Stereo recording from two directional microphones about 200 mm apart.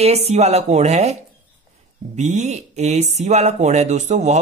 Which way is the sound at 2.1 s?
35° right (ahead or behind).